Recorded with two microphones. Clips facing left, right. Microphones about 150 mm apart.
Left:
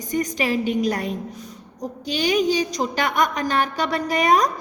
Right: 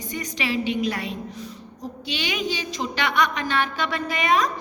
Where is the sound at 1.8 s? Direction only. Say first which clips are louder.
Left 6 dB; 45° left (ahead or behind).